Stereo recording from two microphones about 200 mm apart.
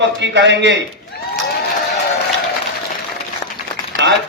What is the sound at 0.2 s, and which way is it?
Speech, 60° right (ahead or behind).